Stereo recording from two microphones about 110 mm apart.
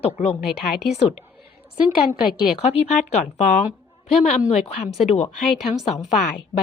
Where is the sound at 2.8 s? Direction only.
90° left.